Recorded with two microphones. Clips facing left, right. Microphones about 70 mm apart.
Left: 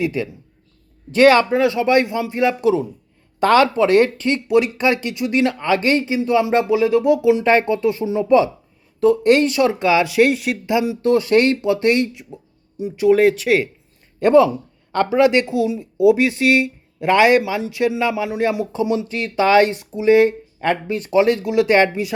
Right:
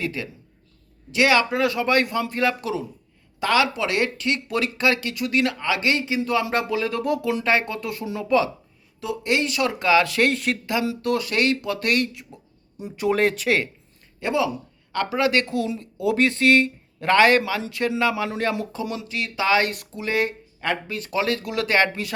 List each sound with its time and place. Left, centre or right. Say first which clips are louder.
0.0 s speech: left 7 dB; centre
1.1 s speech: left 7 dB; left
1.5 s speech: left 5 dB; left
3.4 s speech: left 7 dB; left
4.4 s speech: left 7 dB; left
9.0 s speech: left 10 dB; left; by 10.6 s centre
10.7 s speech: left 7 dB; centre
11.0 s speech: left 10 dB; left
12.7 s speech: left 8 dB; centre
14.2 s speech: left 11 dB; left
14.9 s speech: left 7 dB; left
18.7 s speech: left 9 dB; left